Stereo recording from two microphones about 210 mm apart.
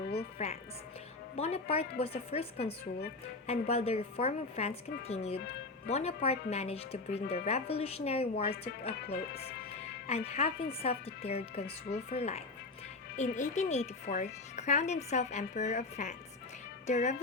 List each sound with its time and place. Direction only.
0.4 s a woman's voice: 30° left (ahead or behind)
9.3 s speech: 50° left (ahead or behind)
10.1 s a woman's voice: 30° left (ahead or behind)